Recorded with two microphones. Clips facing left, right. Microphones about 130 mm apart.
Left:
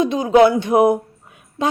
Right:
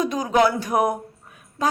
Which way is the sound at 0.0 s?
25° left (ahead or behind).